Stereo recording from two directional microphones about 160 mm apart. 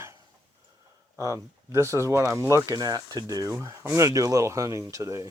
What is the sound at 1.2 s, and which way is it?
Speech, 20° right (ahead or behind).